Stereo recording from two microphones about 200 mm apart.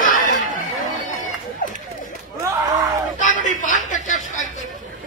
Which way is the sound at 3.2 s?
40° left (ahead or behind).